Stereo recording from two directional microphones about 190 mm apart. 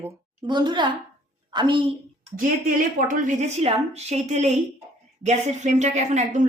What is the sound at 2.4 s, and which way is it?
A woman's voice, 45° right (ahead or behind).